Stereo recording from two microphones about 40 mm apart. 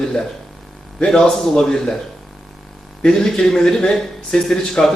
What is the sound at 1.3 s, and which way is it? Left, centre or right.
Speech, centre.